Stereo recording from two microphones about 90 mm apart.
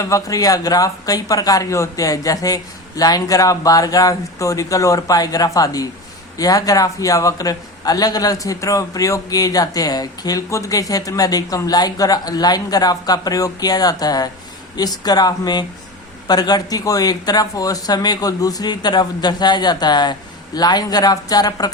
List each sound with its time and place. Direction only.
0.0 s a man's voice: 40° left (ahead or behind)